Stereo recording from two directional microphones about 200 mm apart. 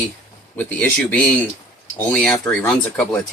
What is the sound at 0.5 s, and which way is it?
Speech, 5° left (ahead or behind).